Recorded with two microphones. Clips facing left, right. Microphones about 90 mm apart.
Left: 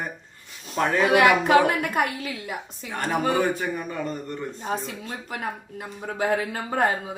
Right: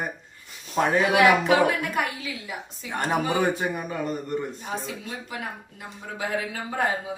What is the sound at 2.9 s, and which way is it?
Speech, 20° right (ahead or behind).